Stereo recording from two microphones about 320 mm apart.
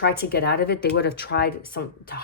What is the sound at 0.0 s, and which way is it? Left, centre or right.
Speech, left.